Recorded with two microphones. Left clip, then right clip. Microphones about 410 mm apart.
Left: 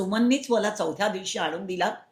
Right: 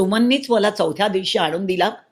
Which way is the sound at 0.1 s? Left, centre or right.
Right.